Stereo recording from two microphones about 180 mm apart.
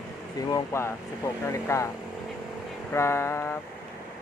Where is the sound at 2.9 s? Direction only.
15° left (ahead or behind).